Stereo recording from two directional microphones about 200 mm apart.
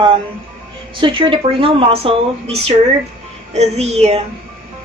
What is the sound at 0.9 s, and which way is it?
A woman's voice, 25° right (ahead or behind).